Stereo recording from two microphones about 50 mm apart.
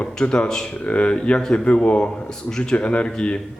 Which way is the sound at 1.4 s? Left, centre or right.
Centre.